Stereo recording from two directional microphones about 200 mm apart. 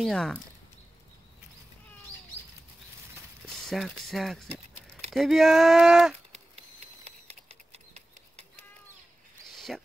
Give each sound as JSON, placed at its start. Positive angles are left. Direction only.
{"t": 0.0, "sound": "speech", "side_deg": 5}
{"t": 3.6, "sound": "speech", "side_deg": 0}
{"t": 7.1, "sound": "typewriter", "side_deg": -30}
{"t": 9.7, "sound": "speech", "side_deg": 0}